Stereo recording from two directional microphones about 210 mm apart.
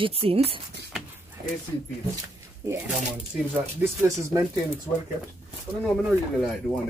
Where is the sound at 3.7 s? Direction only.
15° right (ahead or behind).